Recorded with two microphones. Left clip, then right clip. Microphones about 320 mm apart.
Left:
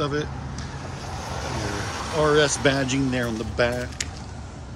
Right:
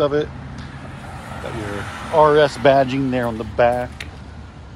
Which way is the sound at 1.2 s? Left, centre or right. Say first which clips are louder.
Right 1 dB; left.